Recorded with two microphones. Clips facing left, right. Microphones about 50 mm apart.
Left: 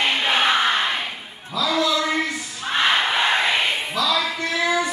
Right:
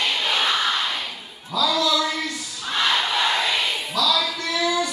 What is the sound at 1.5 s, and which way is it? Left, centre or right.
Music, left.